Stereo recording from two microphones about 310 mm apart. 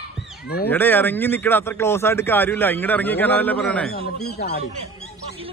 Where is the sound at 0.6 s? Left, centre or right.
Centre.